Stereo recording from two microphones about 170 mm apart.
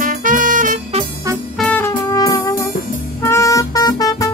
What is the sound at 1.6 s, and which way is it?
Music, 10° left (ahead or behind).